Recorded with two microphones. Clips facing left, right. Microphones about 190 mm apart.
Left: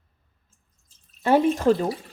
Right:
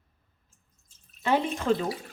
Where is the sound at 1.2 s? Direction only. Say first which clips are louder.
Left 7 dB; 45° left (ahead or behind).